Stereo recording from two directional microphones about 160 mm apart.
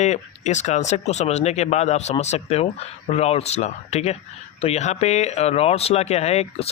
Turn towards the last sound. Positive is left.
turn(degrees=40)  # may be behind; listen again after turning